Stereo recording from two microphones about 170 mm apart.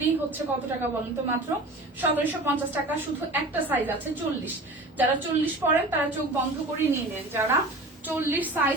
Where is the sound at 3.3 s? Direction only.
10° right (ahead or behind).